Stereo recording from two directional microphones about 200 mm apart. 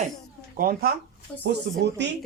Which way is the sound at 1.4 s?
60° right (ahead or behind).